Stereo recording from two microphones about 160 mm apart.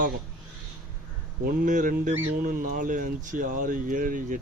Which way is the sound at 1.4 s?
55° right (ahead or behind).